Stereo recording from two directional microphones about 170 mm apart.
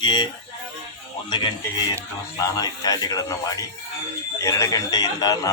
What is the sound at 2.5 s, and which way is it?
A man's voice, 20° left (ahead or behind).